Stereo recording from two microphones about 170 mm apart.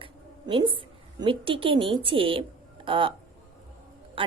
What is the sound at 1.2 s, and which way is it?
A woman's voice, 30° right (ahead or behind).